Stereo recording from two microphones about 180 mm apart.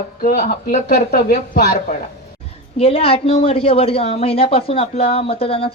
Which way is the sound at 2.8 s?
35° left (ahead or behind).